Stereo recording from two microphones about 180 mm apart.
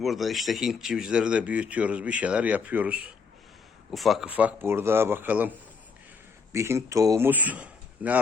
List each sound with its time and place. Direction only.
0.0 s a man's voice: centre (ahead or behind)